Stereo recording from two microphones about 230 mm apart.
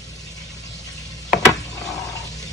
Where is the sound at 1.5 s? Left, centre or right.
Centre.